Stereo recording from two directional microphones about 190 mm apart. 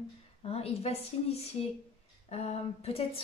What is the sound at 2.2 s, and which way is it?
Speech, 35° left (ahead or behind).